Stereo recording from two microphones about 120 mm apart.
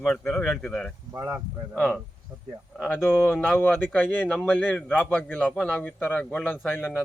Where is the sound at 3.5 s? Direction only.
15° left (ahead or behind).